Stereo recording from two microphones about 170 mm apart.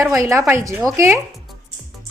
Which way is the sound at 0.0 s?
15° right (ahead or behind).